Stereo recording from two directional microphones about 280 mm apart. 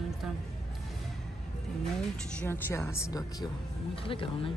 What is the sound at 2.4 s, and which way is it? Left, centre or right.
Speech, centre.